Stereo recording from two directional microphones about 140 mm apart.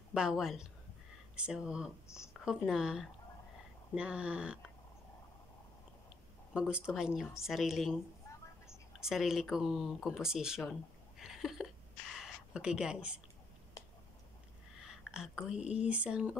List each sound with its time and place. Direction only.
0.1 s speech: 5° right (ahead or behind)
2.0 s speech: 20° left (ahead or behind)
2.4 s speech: 5° right (ahead or behind)
6.5 s speech: 5° right (ahead or behind)
9.0 s speech: 5° right (ahead or behind)
13.8 s a sound: 25° left (ahead or behind)
14.8 s speech: 5° right (ahead or behind)